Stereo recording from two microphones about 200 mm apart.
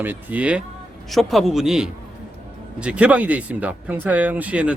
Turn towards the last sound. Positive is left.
turn(degrees=-5)  # may be behind; listen again after turning